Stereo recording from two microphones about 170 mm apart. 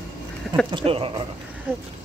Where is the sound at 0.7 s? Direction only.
30° right (ahead or behind).